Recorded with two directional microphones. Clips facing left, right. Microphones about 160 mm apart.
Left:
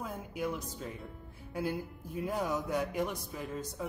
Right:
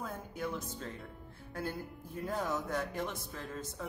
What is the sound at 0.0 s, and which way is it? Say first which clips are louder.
Speech: left 3 dB; 10° left (ahead or behind).